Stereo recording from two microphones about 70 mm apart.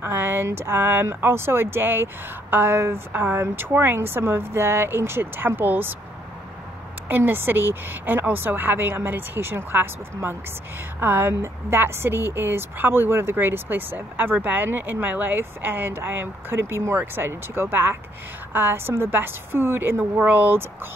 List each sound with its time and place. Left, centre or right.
0.0 s speech: right
7.1 s a woman's voice: right